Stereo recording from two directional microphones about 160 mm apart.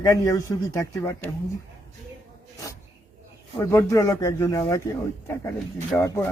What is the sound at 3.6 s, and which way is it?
Speech, 20° left (ahead or behind).